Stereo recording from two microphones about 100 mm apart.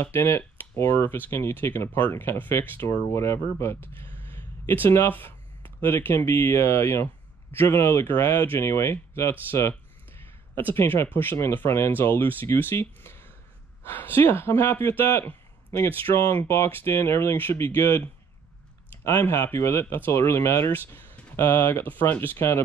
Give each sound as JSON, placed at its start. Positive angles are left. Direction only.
{"t": 0.0, "sound": "speech", "side_deg": 25}